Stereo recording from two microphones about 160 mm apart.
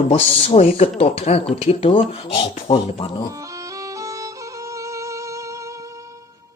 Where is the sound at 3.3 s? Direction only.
20° right (ahead or behind).